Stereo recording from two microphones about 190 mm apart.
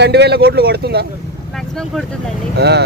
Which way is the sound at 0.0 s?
60° right (ahead or behind).